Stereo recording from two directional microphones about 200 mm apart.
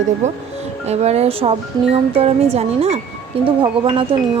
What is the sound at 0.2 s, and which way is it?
Speech, 35° right (ahead or behind).